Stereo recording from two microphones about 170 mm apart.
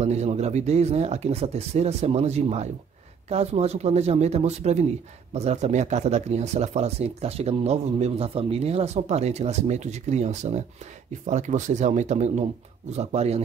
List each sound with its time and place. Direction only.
0.0 s speech: 40° right (ahead or behind)